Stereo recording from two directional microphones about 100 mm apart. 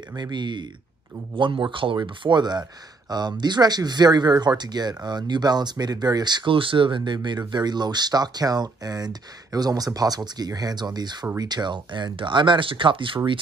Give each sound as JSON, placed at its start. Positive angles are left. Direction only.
{"t": 0.1, "sound": "speech", "side_deg": -45}